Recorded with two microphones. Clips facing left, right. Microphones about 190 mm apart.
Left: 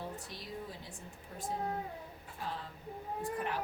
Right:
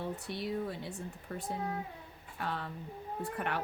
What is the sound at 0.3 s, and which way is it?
Speech, 65° right (ahead or behind).